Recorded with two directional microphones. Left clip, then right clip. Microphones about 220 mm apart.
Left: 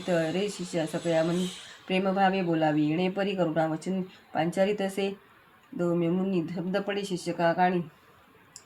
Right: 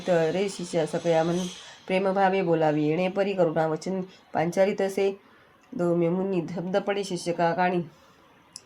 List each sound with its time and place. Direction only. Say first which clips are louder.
0.1 s speech: right 4 dB; 30° right (ahead or behind)